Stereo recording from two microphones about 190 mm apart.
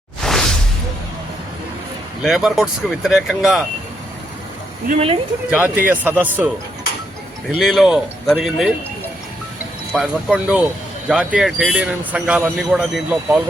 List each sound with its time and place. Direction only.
0.2 s whoosh: centre (ahead or behind)
2.2 s speech: centre (ahead or behind)
4.9 s speech: 30° right (ahead or behind)
5.5 s speech: 5° right (ahead or behind)
7.6 s speech: centre (ahead or behind)
9.9 s speech: centre (ahead or behind)